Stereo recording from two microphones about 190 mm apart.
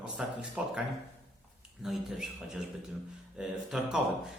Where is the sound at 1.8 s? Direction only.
5° right (ahead or behind).